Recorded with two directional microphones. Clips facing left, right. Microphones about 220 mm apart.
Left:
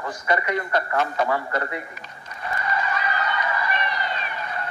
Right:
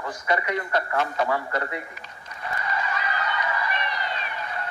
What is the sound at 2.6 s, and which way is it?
Honk, 50° left (ahead or behind).